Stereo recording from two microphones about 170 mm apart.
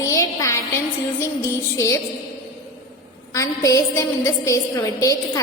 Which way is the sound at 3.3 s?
20° left (ahead or behind).